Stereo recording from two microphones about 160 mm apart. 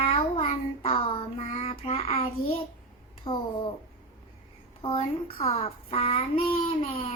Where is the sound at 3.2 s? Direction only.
35° left (ahead or behind).